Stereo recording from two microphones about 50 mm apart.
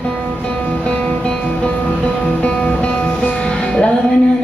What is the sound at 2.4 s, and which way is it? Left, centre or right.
Music, left.